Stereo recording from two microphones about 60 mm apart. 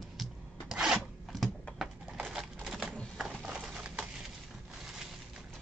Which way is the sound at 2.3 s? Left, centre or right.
Centre.